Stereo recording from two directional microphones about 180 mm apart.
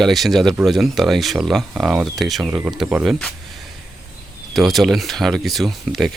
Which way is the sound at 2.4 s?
10° right (ahead or behind).